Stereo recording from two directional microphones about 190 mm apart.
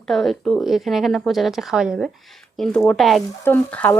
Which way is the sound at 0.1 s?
Centre (ahead or behind).